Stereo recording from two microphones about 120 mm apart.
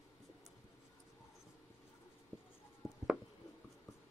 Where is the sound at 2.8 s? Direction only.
25° left (ahead or behind).